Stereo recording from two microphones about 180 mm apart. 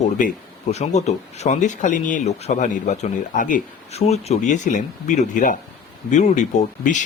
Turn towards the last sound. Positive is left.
turn(degrees=40)  # may be behind; listen again after turning